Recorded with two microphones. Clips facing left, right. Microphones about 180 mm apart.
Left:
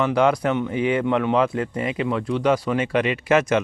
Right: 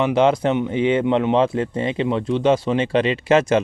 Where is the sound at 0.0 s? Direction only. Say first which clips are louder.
Right 2 dB; 20° right (ahead or behind).